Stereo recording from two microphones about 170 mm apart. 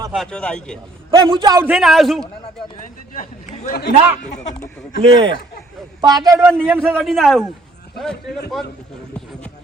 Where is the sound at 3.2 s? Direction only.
45° left (ahead or behind).